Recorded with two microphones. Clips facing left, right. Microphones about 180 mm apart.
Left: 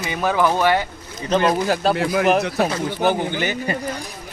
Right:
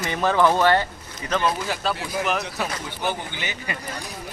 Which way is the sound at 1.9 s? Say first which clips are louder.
Left 8 dB; 70° left (ahead or behind).